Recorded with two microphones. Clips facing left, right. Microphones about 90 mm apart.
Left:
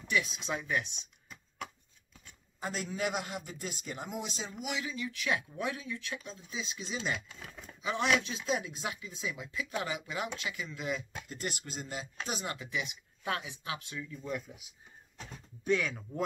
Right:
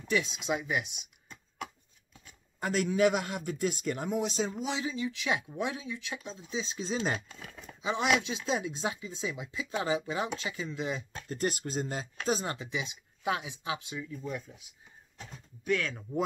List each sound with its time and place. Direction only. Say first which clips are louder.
0.1 s speech: right 3 dB; 25° right (ahead or behind)
2.6 s a man's voice: right 9 dB; 60° right (ahead or behind)
4.6 s speech: right 4 dB; 30° right (ahead or behind)
7.8 s speech: right 2 dB; 20° right (ahead or behind)
11.2 s speech: right 7 dB; 40° right (ahead or behind)
12.6 s speech: right 1 dB; 20° right (ahead or behind)
14.5 s speech: left 1 dB; 5° left (ahead or behind)
15.8 s speech: even; centre (ahead or behind)